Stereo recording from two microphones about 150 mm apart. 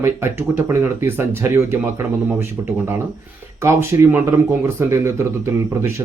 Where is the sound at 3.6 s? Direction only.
20° right (ahead or behind).